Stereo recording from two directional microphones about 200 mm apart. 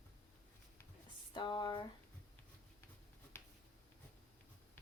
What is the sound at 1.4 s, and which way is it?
Speech, 25° left (ahead or behind).